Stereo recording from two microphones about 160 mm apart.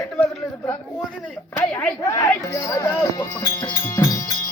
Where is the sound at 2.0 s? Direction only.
20° left (ahead or behind).